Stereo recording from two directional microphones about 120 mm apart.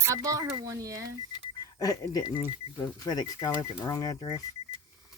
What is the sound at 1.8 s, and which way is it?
Speech, 30° left (ahead or behind).